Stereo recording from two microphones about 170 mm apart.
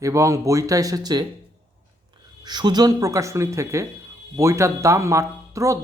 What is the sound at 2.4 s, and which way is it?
Speech, 25° right (ahead or behind).